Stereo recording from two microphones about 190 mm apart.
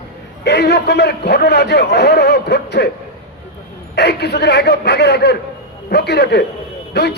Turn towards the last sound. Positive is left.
turn(degrees=60)  # may be behind; listen again after turning